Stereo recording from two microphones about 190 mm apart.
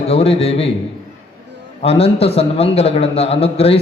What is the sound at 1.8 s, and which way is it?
A man's voice, 30° left (ahead or behind).